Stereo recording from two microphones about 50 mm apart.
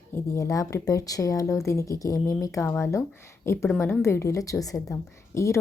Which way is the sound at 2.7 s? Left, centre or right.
Left.